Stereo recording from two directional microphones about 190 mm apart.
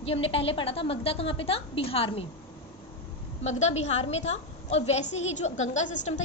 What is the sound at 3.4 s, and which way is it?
A woman's voice, 35° left (ahead or behind).